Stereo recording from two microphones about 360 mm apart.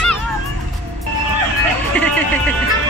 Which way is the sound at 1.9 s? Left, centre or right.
Centre.